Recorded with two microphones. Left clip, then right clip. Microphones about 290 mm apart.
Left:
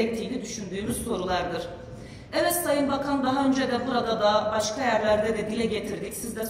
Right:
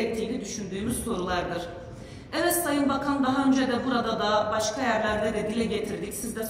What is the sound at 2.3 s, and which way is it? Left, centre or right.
A man's voice, left.